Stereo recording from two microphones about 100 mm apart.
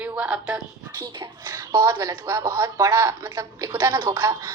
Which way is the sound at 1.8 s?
35° right (ahead or behind).